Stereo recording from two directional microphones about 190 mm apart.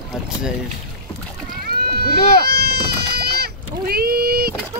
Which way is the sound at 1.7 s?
55° right (ahead or behind).